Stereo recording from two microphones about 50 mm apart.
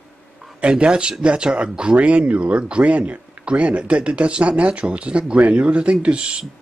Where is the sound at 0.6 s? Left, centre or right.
Centre.